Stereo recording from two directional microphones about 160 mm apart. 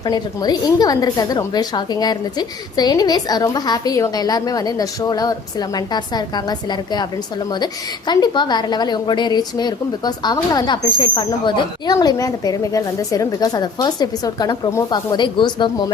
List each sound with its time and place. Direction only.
0.0 s a woman's voice: 25° left (ahead or behind)